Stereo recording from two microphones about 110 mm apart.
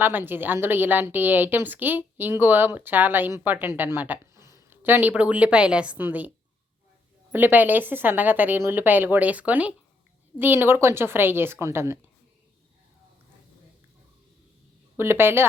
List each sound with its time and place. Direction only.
0.0 s a woman's voice: 20° right (ahead or behind)
7.3 s a woman's voice: 15° right (ahead or behind)
14.9 s a woman's voice: 20° right (ahead or behind)